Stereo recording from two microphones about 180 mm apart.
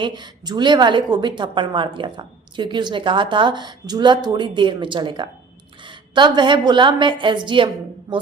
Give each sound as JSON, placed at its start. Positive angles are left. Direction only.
{"t": 0.0, "sound": "a woman's voice", "side_deg": -25}